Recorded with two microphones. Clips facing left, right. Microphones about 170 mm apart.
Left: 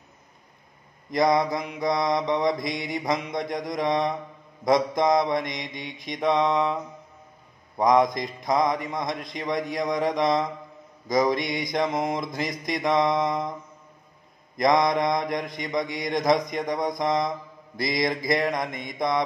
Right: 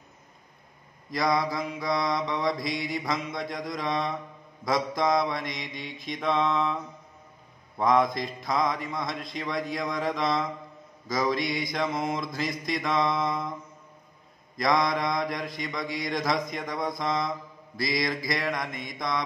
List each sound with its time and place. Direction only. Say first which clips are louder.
1.1 s speech: left 5 dB; 20° left (ahead or behind)
7.8 s speech: left 3 dB; 15° left (ahead or behind)
14.6 s speech: left 4 dB; 20° left (ahead or behind)